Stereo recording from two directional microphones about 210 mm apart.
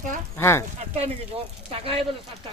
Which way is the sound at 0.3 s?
10° left (ahead or behind).